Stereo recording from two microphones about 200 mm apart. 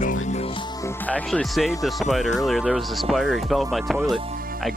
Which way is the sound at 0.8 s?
10° left (ahead or behind).